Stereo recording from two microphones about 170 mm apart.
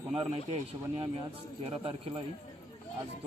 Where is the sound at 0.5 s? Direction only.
35° right (ahead or behind).